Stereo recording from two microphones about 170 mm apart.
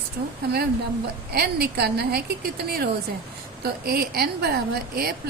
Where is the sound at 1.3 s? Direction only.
65° right (ahead or behind).